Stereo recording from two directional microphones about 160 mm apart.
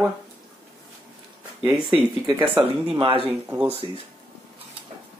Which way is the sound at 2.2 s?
25° right (ahead or behind).